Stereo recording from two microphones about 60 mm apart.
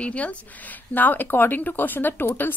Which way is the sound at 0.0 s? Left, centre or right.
Left.